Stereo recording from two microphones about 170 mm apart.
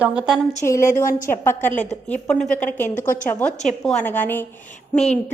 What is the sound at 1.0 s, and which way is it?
Speech, 50° left (ahead or behind).